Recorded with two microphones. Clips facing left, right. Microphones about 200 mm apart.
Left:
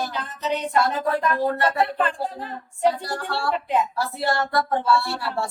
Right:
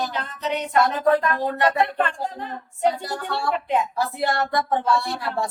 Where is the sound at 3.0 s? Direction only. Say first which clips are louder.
Even; 20° right (ahead or behind).